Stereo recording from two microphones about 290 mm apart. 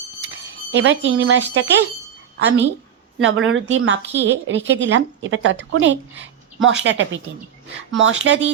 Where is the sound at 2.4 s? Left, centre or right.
Right.